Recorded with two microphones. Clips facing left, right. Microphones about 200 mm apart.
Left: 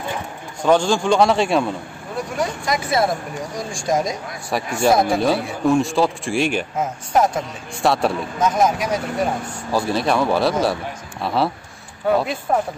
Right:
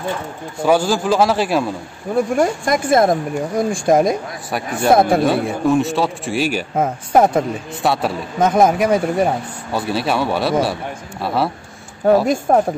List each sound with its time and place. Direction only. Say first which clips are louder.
0.6 s a man's voice: right 1 dB; 5° right (ahead or behind)
2.1 s speech: right 8 dB; 50° right (ahead or behind)
4.5 s a man's voice: right 1 dB; centre (ahead or behind)
4.9 s speech: right 8 dB; 55° right (ahead or behind)
5.7 s a man's voice: left 1 dB; centre (ahead or behind)
6.8 s speech: right 5 dB; 55° right (ahead or behind)
7.8 s a man's voice: left 1 dB; centre (ahead or behind)
8.4 s speech: right 6 dB; 55° right (ahead or behind)
9.7 s a man's voice: left 1 dB; centre (ahead or behind)
12.3 s speech: right 6 dB; 50° right (ahead or behind)